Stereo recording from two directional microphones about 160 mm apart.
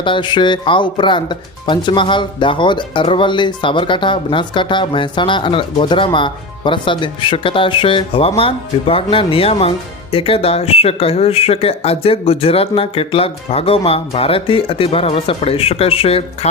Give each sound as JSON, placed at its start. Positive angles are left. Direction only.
{"t": 0.0, "sound": "speech", "side_deg": 30}